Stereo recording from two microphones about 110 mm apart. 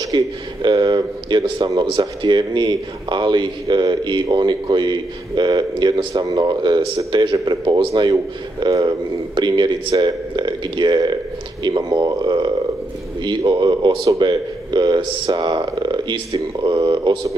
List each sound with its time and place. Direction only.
0.1 s speech: 45° right (ahead or behind)